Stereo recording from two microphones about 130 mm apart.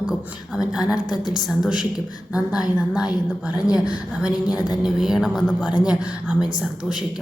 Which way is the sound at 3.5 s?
30° left (ahead or behind).